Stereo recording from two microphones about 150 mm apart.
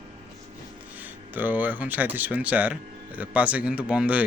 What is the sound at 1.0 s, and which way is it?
Speech, 10° right (ahead or behind).